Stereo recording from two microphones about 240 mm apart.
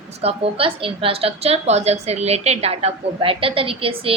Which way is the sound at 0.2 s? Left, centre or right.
Right.